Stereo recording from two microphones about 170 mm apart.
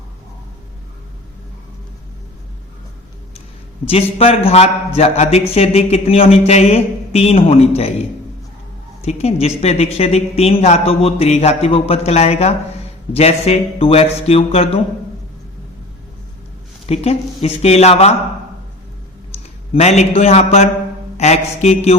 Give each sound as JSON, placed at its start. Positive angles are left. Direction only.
{"t": 3.8, "sound": "speech", "side_deg": 35}
{"t": 16.8, "sound": "speech", "side_deg": 35}
{"t": 19.7, "sound": "speech", "side_deg": 40}